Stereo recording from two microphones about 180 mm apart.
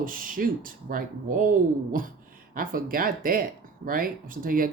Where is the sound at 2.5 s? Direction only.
50° right (ahead or behind).